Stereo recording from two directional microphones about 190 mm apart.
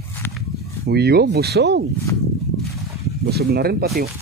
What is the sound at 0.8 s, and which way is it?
Speech, 60° right (ahead or behind).